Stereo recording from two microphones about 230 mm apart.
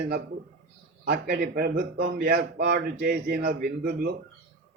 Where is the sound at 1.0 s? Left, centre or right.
Right.